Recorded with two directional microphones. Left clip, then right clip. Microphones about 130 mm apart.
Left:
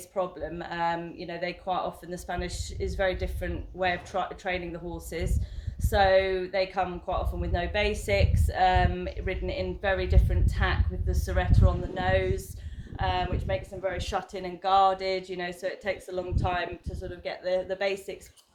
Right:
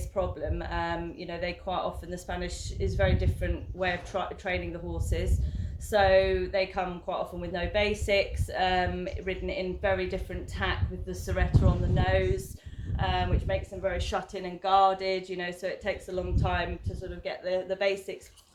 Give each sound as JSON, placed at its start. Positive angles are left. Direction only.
{"t": 0.1, "sound": "speech", "side_deg": 35}